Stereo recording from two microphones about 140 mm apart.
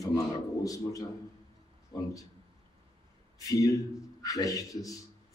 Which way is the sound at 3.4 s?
25° left (ahead or behind).